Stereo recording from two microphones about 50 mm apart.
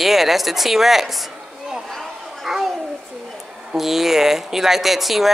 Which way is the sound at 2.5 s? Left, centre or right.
Centre.